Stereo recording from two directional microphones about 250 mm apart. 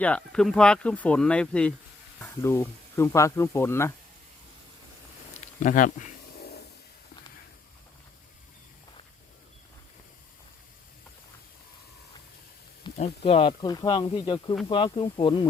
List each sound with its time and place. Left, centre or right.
0.0 s speech: centre
5.5 s a sound: left
12.8 s speech: left